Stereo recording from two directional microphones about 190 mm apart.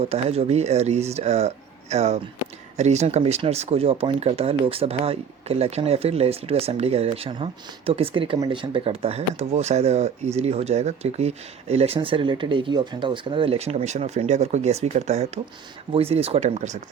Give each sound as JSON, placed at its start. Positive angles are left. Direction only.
{"t": 0.0, "sound": "speech", "side_deg": -30}